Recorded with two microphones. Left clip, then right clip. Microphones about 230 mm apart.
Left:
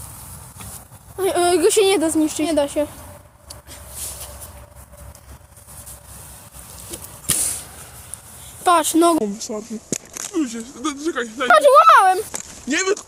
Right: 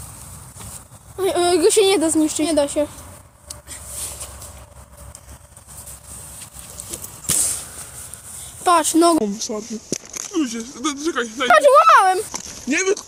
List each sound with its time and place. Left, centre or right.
1.2 s a woman's voice: centre
7.3 s a sound: centre
8.6 s speech: centre
9.9 s a sound: centre
10.3 s speech: right
11.4 s a woman's voice: centre
12.6 s speech: right